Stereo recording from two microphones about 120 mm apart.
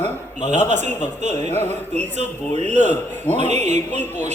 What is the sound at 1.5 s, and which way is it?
Speech, 20° left (ahead or behind).